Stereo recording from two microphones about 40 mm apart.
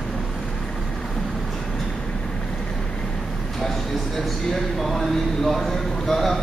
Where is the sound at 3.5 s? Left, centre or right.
Centre.